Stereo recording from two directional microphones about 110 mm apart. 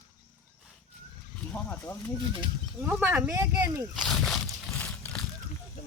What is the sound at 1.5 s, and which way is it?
Speech, 20° left (ahead or behind).